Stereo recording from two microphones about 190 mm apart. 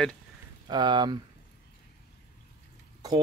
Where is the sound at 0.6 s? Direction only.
25° right (ahead or behind).